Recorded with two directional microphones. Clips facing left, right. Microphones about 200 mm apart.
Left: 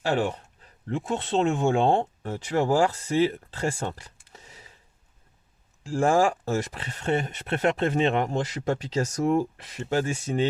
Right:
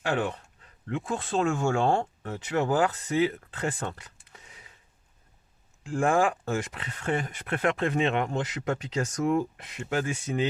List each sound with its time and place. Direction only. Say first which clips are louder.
0.0 s speech: left 3 dB; 25° left (ahead or behind)
2.2 s speech: left 3 dB; 30° left (ahead or behind)
5.8 s speech: left 3 dB; 30° left (ahead or behind)